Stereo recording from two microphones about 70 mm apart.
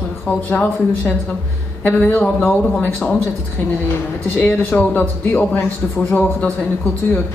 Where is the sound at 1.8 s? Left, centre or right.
Left.